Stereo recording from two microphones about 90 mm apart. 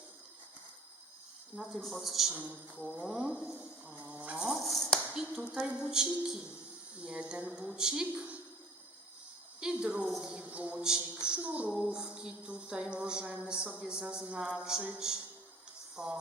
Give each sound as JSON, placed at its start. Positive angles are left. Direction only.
{"t": 1.5, "sound": "a man's voice", "side_deg": 0}
{"t": 2.3, "sound": "music", "side_deg": -15}
{"t": 4.6, "sound": "speech", "side_deg": 5}
{"t": 4.9, "sound": "music", "side_deg": -10}
{"t": 9.6, "sound": "music", "side_deg": -10}